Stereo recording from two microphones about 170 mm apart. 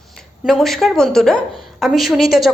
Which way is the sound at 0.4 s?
Centre (ahead or behind).